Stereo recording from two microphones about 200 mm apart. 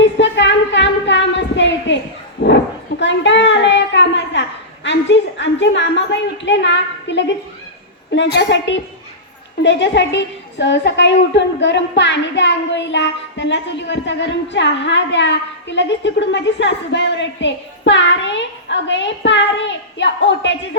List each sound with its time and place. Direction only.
0.0 s singing: 65° left (ahead or behind)
2.4 s dog: 60° left (ahead or behind)
3.0 s a sound: 65° left (ahead or behind)
8.1 s a woman's voice: 60° left (ahead or behind)